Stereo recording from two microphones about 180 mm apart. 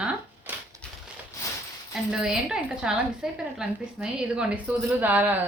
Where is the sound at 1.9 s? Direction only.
5° right (ahead or behind).